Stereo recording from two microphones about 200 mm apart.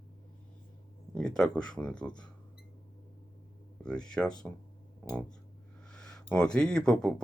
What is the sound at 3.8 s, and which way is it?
Speech, 5° left (ahead or behind).